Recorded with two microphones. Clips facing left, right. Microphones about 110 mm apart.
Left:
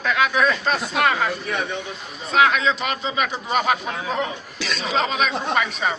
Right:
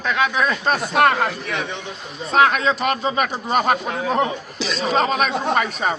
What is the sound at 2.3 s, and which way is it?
Speech, 45° right (ahead or behind).